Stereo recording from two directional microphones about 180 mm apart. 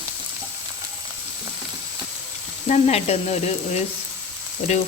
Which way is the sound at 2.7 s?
35° left (ahead or behind).